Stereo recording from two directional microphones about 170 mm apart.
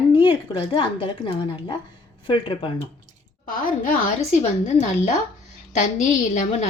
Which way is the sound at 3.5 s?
55° left (ahead or behind).